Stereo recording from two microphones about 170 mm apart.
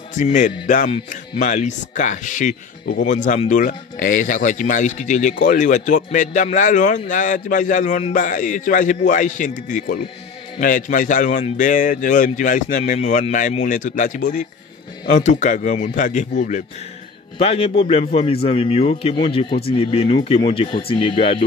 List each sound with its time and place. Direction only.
0.1 s speech: 50° left (ahead or behind)
0.8 s speech: 30° left (ahead or behind)
1.4 s speech: 45° left (ahead or behind)
17.4 s a man's voice: 35° left (ahead or behind)